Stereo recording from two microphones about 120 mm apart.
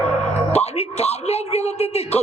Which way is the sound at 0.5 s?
60° left (ahead or behind).